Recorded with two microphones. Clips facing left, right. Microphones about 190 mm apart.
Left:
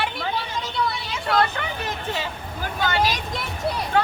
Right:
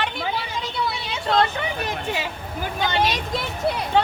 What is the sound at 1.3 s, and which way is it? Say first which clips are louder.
Speech: right 1 dB; 25° right (ahead or behind).